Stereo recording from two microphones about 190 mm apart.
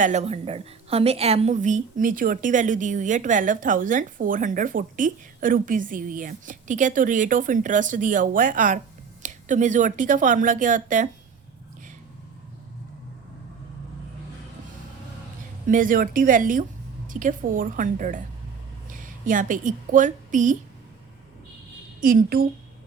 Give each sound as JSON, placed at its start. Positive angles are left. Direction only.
{"t": 0.0, "sound": "a woman's voice", "side_deg": -35}
{"t": 15.6, "sound": "a woman's voice", "side_deg": -45}
{"t": 22.0, "sound": "a woman's voice", "side_deg": -50}